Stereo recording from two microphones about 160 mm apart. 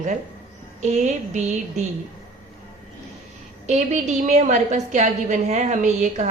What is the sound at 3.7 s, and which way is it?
A woman's voice, 45° right (ahead or behind).